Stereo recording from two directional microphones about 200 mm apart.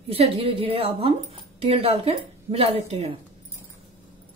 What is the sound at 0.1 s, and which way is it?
Speech, 30° right (ahead or behind).